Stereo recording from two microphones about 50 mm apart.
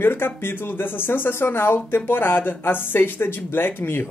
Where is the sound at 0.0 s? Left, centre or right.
Left.